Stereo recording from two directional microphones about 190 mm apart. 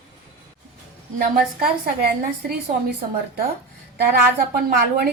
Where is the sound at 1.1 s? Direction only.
50° right (ahead or behind).